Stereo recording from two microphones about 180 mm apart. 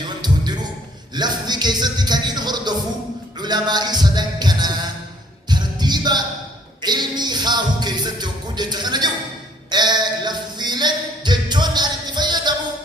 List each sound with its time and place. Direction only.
0.2 s a sound: 25° right (ahead or behind)
1.1 s music: 25° right (ahead or behind)
3.4 s a man's voice: 25° right (ahead or behind)
5.5 s music: 25° right (ahead or behind)
9.6 s speech: 25° right (ahead or behind)